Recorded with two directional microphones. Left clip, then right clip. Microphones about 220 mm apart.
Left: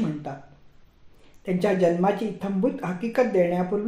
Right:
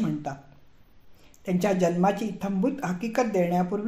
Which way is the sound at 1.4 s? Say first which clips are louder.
Left 3 dB; 30° right (ahead or behind).